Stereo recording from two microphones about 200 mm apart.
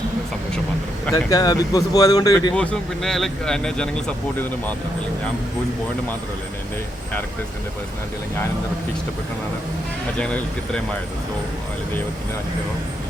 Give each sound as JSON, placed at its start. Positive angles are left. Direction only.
{"t": 1.1, "sound": "speech", "side_deg": 20}
{"t": 2.6, "sound": "speech", "side_deg": 5}
{"t": 10.2, "sound": "speech", "side_deg": 5}